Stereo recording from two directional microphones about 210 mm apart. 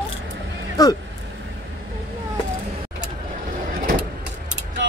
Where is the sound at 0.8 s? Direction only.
15° left (ahead or behind).